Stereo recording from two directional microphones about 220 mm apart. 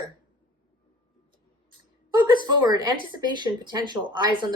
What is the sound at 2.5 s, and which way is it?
Speech, 20° right (ahead or behind).